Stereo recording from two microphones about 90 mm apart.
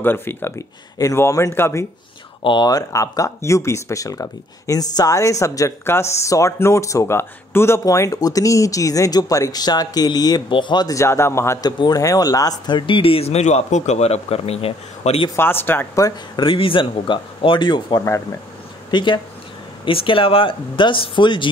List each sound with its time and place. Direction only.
0.0 s speech: 25° left (ahead or behind)
2.4 s speech: 60° left (ahead or behind)
2.7 s speech: 40° left (ahead or behind)
10.5 s speech: 60° left (ahead or behind)
10.9 s speech: 30° left (ahead or behind)
11.6 s speech: 45° left (ahead or behind)
12.7 s speech: 75° left (ahead or behind)
14.3 s speech: 90° left
15.3 s speech: 25° left (ahead or behind)
16.3 s speech: 75° left (ahead or behind); by 19.2 s 55° left (ahead or behind)
19.8 s speech: 75° left (ahead or behind)